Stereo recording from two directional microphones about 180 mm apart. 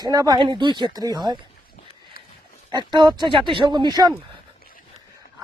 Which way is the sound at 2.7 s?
25° right (ahead or behind).